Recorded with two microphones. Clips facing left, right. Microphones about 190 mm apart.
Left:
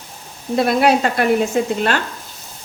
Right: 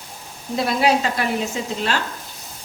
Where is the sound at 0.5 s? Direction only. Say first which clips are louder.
Left 4 dB; 55° left (ahead or behind).